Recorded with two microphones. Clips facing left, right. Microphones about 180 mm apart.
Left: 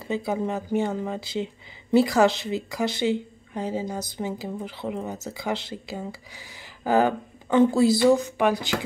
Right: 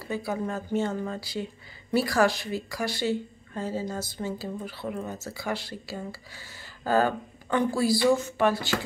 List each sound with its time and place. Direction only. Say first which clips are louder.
0.0 s speech: left 4 dB; 20° left (ahead or behind)